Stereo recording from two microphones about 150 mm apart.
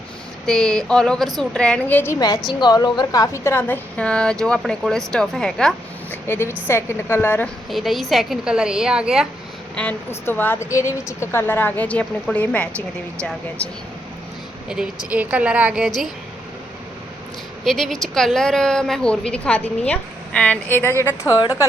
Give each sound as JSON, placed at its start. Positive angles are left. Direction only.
{"t": 0.4, "sound": "a woman's voice", "side_deg": 0}
{"t": 2.1, "sound": "a woman's voice", "side_deg": 25}
{"t": 7.7, "sound": "a woman's voice", "side_deg": 0}
{"t": 9.7, "sound": "a woman's voice", "side_deg": 15}
{"t": 15.1, "sound": "a woman's voice", "side_deg": -10}
{"t": 17.7, "sound": "a woman's voice", "side_deg": 0}